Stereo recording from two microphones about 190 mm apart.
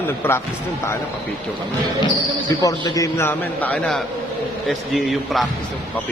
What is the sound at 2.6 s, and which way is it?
A man's voice, 20° left (ahead or behind).